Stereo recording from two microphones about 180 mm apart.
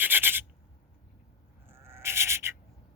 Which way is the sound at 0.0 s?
10° right (ahead or behind).